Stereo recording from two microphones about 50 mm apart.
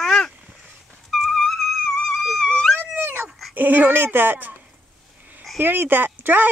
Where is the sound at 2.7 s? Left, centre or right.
Right.